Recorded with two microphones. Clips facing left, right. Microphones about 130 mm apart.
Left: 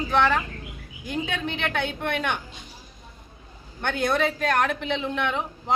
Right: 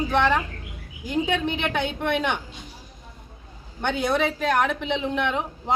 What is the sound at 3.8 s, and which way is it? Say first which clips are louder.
Speech: right 1 dB; 10° right (ahead or behind).